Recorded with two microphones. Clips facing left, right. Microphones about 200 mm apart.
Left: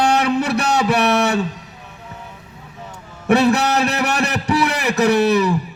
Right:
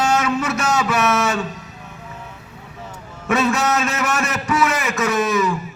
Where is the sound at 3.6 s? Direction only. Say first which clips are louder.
Left 2 dB; 65° left (ahead or behind).